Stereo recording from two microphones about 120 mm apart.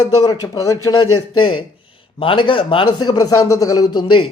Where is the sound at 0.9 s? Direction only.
45° left (ahead or behind).